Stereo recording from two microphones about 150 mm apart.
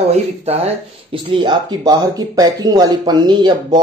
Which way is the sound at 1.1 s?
35° right (ahead or behind).